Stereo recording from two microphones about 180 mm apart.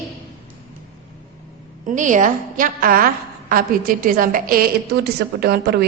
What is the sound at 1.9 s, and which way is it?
A woman's voice, 45° right (ahead or behind).